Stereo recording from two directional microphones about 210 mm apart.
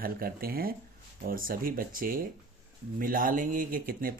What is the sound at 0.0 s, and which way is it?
Speech, 45° right (ahead or behind).